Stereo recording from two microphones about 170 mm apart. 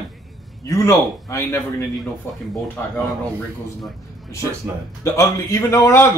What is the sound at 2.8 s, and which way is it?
Whimper, 10° left (ahead or behind).